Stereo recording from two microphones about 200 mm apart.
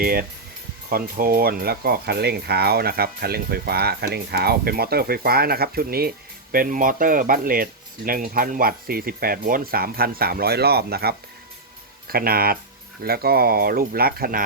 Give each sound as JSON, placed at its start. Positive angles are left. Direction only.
{"t": 0.0, "sound": "speech", "side_deg": -45}